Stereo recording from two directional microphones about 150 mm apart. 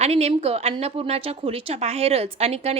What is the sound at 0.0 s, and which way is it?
A woman's voice, 45° right (ahead or behind).